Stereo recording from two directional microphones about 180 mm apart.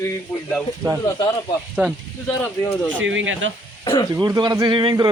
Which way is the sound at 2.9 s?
90° right.